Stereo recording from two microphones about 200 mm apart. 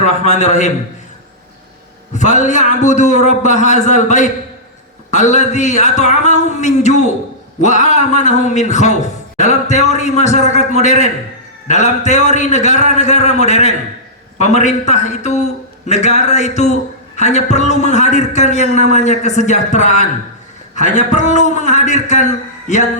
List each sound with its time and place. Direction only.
0.0 s a man's voice: 35° left (ahead or behind)
2.1 s a man's voice: 35° left (ahead or behind)